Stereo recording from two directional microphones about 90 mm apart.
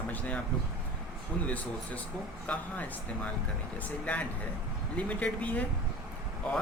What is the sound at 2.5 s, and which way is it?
Speech, 15° left (ahead or behind).